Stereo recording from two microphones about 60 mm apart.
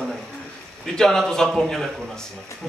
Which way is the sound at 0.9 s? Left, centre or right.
Centre.